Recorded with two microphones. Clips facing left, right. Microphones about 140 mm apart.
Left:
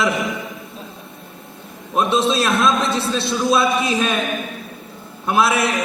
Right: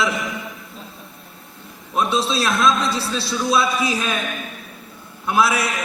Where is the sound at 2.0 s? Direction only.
20° left (ahead or behind).